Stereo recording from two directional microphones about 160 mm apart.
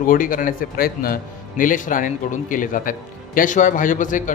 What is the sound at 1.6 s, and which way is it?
A man's voice, 55° left (ahead or behind).